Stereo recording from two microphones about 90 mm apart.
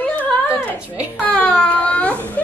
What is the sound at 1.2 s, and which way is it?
Baby cry, 15° left (ahead or behind).